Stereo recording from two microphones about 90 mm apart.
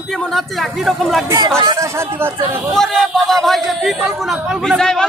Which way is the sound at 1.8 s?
30° right (ahead or behind).